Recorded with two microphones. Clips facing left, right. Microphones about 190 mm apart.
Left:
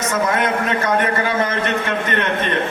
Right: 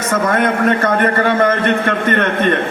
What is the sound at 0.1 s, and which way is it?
A man's voice, 55° right (ahead or behind).